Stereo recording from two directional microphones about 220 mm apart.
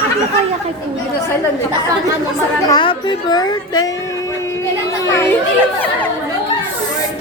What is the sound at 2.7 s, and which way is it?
A woman's voice, 20° left (ahead or behind).